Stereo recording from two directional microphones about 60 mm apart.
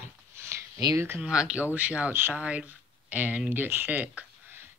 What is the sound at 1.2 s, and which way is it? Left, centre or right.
Speech, centre.